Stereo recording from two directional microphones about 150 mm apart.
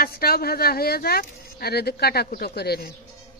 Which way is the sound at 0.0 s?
90° left.